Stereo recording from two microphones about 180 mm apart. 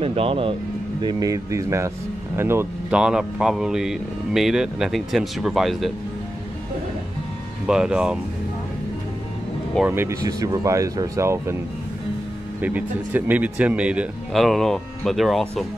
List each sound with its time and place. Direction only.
0.0 s speech: 30° right (ahead or behind)
1.0 s a man's voice: 20° right (ahead or behind); by 5.9 s centre (ahead or behind)
7.6 s a man's voice: 5° right (ahead or behind)
9.8 s speech: 15° right (ahead or behind)
12.6 s a man's voice: 10° right (ahead or behind)